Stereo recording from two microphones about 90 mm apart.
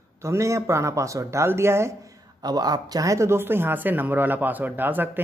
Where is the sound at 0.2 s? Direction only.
35° right (ahead or behind).